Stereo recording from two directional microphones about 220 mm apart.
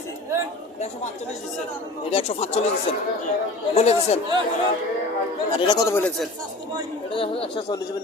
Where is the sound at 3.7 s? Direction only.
30° left (ahead or behind).